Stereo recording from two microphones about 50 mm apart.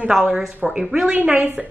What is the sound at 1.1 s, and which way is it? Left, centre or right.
Speech, right.